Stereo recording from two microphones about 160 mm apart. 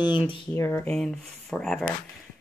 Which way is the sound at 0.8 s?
5° left (ahead or behind).